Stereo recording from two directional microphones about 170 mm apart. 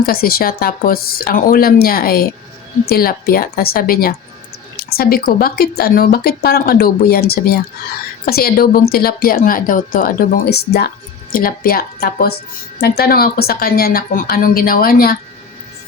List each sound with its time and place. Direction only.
0.0 s speech: 60° left (ahead or behind)